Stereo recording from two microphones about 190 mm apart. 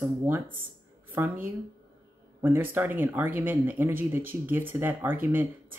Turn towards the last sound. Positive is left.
turn(degrees=-10)  # may be behind; listen again after turning